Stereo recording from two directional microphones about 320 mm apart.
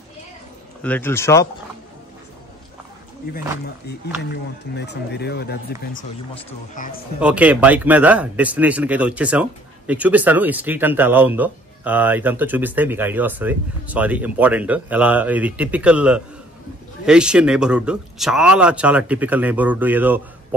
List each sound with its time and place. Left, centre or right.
0.8 s speech: centre
4.7 s speech: left
7.2 s speech: centre